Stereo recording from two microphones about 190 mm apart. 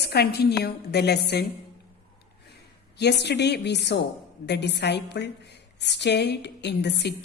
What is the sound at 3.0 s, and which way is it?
A woman's voice, 60° left (ahead or behind).